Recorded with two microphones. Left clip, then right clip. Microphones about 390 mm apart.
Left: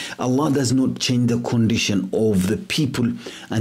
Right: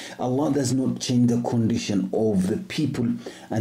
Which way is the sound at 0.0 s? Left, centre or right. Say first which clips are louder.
Left 3 dB; left.